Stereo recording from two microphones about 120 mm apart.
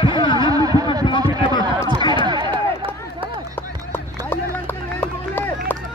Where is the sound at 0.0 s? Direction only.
45° left (ahead or behind).